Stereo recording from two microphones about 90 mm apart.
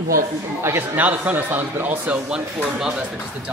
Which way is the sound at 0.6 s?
20° right (ahead or behind).